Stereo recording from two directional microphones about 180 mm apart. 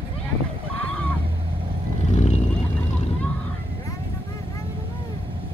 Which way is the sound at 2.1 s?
35° left (ahead or behind).